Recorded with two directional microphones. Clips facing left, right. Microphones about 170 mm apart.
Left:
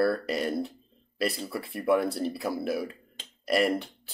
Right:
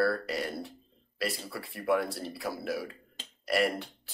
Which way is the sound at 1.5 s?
25° left (ahead or behind).